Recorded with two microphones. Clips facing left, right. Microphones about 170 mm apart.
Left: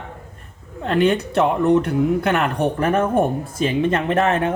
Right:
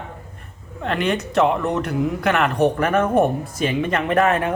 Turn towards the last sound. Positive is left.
turn(degrees=25)  # may be behind; listen again after turning